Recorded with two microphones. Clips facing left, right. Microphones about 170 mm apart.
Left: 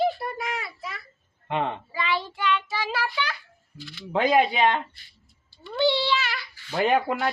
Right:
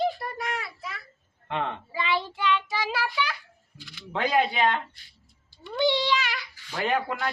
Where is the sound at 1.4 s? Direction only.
15° left (ahead or behind).